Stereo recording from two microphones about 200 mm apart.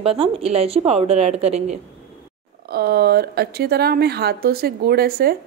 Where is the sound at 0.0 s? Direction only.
30° right (ahead or behind).